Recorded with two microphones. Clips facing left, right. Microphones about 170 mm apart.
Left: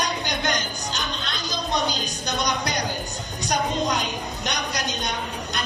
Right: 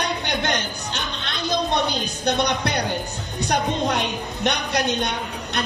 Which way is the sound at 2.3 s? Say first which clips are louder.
Right 5 dB; 60° right (ahead or behind).